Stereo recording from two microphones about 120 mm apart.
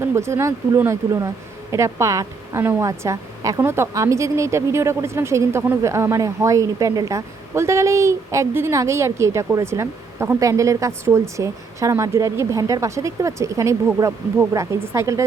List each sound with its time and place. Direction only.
0.0 s speech: 25° right (ahead or behind)